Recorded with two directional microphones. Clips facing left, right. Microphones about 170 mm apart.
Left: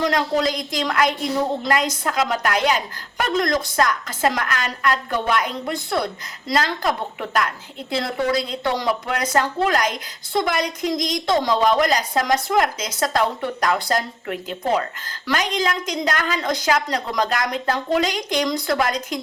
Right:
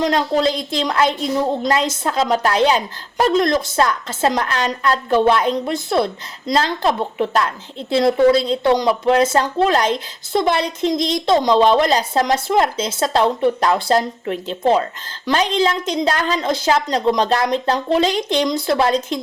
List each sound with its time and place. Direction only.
0.0 s a woman's voice: 25° right (ahead or behind)